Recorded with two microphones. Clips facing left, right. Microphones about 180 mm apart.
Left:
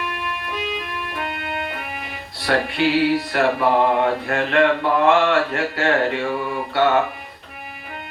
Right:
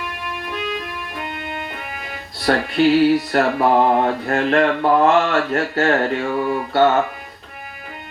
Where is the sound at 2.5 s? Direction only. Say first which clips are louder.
Right 2 dB; 40° right (ahead or behind).